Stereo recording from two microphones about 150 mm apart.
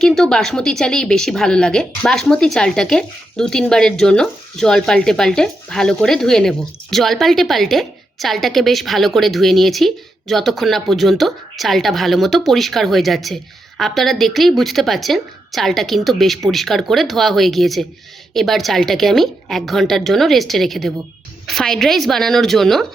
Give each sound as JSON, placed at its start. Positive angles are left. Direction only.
{"t": 0.0, "sound": "a woman's voice", "side_deg": 5}